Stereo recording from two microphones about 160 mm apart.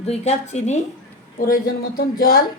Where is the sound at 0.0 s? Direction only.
40° left (ahead or behind).